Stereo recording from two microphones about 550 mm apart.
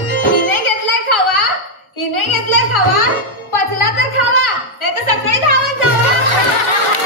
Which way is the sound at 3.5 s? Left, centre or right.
Left.